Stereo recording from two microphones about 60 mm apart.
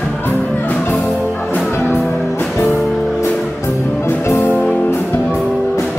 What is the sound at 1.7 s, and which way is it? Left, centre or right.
Music, left.